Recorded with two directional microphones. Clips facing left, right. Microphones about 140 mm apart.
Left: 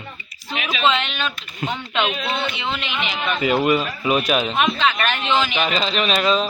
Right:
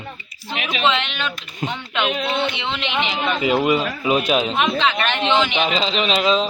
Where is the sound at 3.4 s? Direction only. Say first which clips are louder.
Even; 15° right (ahead or behind).